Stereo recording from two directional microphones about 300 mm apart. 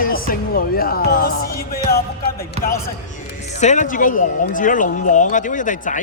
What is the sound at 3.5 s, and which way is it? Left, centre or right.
Speech, left.